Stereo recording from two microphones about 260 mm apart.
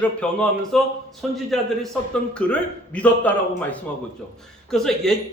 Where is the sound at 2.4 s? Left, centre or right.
Centre.